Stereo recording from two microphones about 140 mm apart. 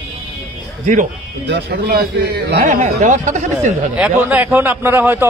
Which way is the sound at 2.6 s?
60° right (ahead or behind).